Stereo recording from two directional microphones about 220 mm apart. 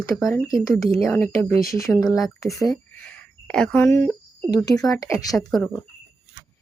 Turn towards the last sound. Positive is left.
turn(degrees=0)  # may be behind; listen again after turning